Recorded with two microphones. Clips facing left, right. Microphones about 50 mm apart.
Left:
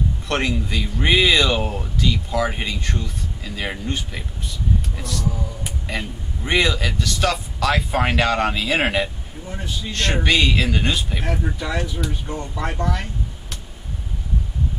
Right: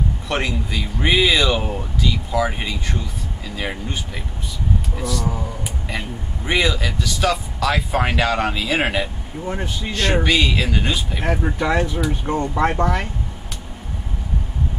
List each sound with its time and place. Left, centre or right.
0.3 s speech: centre
10.2 s speech: centre
11.2 s speech: right